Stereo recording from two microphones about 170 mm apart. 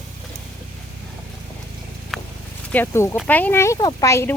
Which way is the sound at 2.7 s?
15° left (ahead or behind).